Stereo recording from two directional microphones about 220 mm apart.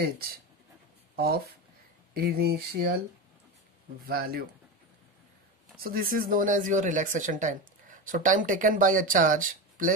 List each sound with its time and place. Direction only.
1.1 s speech: 45° right (ahead or behind)
4.0 s speech: 45° right (ahead or behind)
5.8 s speech: 40° right (ahead or behind)